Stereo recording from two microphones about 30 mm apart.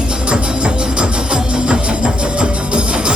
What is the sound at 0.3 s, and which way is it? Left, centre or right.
Music, right.